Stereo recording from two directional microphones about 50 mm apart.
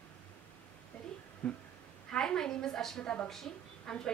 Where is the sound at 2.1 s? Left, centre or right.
Centre.